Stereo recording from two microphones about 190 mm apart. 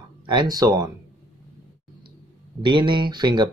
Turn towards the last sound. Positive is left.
turn(degrees=-20)  # may be behind; listen again after turning